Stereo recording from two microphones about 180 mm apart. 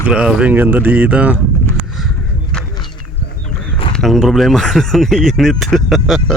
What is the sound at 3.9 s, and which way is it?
Speech, centre (ahead or behind).